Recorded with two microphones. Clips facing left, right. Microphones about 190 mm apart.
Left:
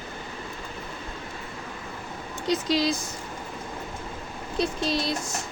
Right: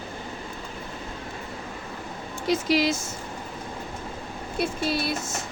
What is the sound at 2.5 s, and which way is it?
Speech, 10° right (ahead or behind).